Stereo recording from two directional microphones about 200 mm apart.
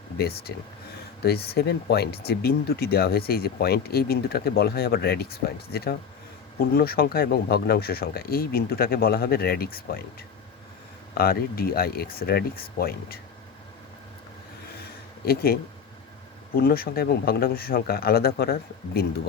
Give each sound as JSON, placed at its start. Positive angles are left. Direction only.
{"t": 0.2, "sound": "speech", "side_deg": 50}
{"t": 11.1, "sound": "speech", "side_deg": 50}
{"t": 15.2, "sound": "speech", "side_deg": 50}
{"t": 16.6, "sound": "speech", "side_deg": 50}